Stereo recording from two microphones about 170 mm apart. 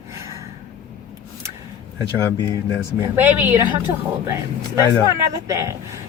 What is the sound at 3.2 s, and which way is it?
Speech, 10° right (ahead or behind).